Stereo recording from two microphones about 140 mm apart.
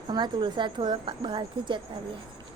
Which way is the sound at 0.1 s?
35° right (ahead or behind).